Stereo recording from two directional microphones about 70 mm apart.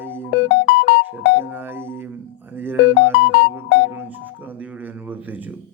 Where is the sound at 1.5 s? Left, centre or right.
Right.